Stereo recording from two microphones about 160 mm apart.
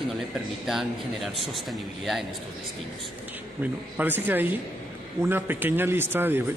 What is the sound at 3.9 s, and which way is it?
A man's voice, 10° right (ahead or behind).